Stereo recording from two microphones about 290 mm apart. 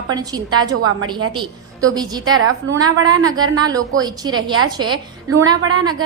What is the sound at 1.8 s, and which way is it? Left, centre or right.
Speech, centre.